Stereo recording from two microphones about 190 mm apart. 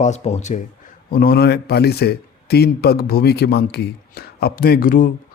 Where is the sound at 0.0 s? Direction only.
35° left (ahead or behind).